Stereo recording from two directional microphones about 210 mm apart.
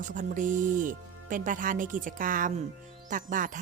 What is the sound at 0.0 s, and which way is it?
Speech, 40° right (ahead or behind).